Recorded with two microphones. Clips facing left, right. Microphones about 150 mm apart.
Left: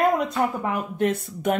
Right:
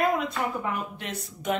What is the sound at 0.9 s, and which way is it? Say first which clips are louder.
Speech: left 13 dB; 50° left (ahead or behind).